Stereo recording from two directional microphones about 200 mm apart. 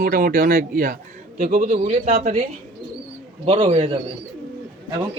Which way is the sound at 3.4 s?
30° right (ahead or behind).